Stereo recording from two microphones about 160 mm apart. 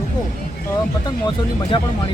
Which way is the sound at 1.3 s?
30° left (ahead or behind).